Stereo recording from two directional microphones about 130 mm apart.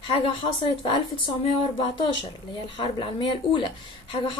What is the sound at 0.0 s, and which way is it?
Speech, 40° left (ahead or behind).